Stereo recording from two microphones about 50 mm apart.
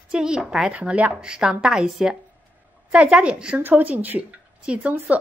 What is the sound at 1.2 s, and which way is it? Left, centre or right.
Speech, centre.